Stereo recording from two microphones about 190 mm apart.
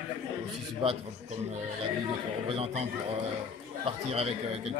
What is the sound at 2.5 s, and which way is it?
Speech, 30° right (ahead or behind).